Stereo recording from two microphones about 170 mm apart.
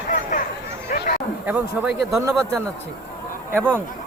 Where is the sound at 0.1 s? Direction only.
50° left (ahead or behind).